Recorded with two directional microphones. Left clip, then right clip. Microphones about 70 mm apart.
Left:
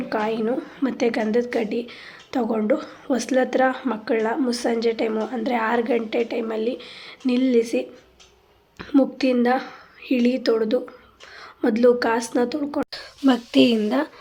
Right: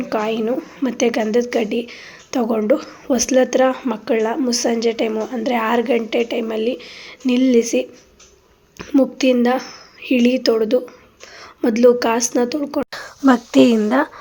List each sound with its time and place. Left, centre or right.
0.1 s a woman's voice: right
0.4 s a woman's voice: right
0.9 s a woman's voice: right
11.3 s a woman's voice: right